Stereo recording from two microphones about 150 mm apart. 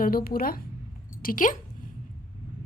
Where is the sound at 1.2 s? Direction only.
65° left (ahead or behind).